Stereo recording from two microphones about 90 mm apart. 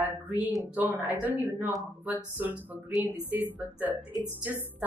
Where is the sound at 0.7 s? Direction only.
20° right (ahead or behind).